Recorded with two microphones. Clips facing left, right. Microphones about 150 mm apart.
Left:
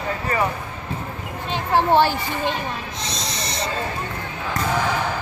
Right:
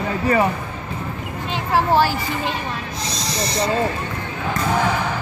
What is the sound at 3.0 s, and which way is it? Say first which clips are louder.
Snake: right 4 dB; centre (ahead or behind).